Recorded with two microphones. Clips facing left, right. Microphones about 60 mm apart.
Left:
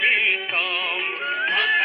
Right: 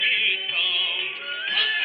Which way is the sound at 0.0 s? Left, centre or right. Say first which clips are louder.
Left 4 dB; left.